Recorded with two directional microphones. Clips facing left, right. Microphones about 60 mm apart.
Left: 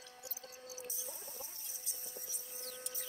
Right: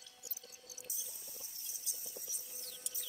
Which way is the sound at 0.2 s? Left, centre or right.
Left.